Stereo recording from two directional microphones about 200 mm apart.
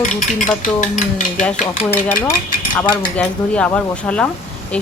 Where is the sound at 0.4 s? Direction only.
40° left (ahead or behind).